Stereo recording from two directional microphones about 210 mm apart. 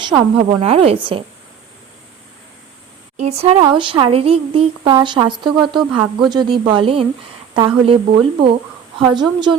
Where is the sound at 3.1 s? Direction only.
30° right (ahead or behind).